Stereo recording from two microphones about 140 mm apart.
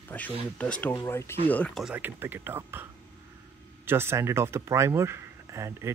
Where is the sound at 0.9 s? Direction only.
20° left (ahead or behind).